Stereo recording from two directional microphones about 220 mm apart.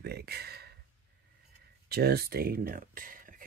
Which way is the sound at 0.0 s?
45° right (ahead or behind).